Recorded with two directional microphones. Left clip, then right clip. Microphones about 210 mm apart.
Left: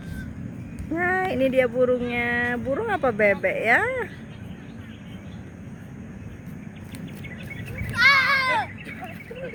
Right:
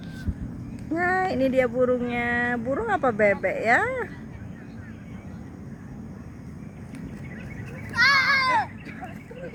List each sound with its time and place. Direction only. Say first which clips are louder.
0.9 s child singing: even; centre (ahead or behind)
1.5 s speech: left 2 dB; centre (ahead or behind)
8.0 s a sound: left 2 dB; 35° left (ahead or behind)